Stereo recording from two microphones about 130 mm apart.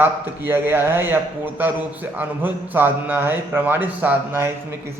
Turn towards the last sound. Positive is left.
turn(degrees=-15)  # may be behind; listen again after turning